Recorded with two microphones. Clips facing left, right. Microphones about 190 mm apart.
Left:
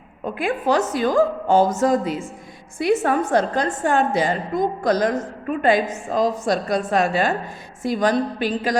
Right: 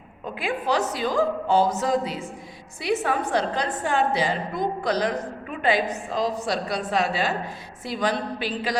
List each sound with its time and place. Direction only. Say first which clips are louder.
0.3 s a woman's voice: left 4 dB; 50° left (ahead or behind)